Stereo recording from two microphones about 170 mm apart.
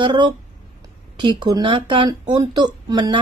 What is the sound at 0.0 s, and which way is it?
Speech, 25° right (ahead or behind).